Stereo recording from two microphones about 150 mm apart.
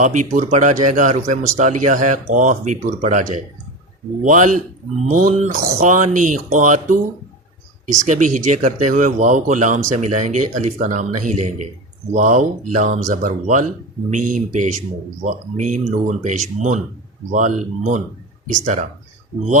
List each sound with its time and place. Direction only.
0.0 s speech: 55° right (ahead or behind)